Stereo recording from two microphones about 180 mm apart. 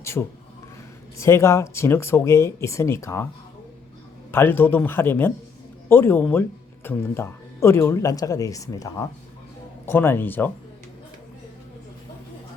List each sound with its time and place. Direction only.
0.0 s speech: 15° left (ahead or behind)
4.3 s speech: 10° left (ahead or behind)